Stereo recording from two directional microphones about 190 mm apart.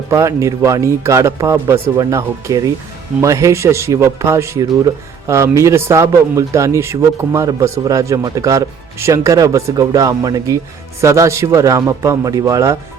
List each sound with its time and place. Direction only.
0.1 s speech: 15° right (ahead or behind)